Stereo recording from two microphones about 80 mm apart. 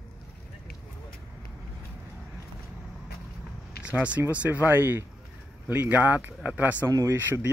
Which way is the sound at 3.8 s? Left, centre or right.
Centre.